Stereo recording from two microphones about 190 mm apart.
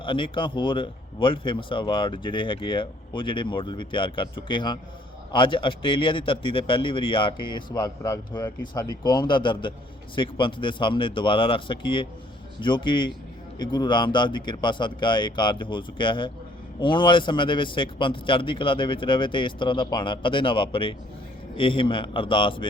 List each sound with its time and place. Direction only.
0.0 s speech: 25° left (ahead or behind)